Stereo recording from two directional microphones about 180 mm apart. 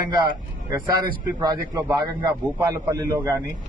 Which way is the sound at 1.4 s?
20° right (ahead or behind).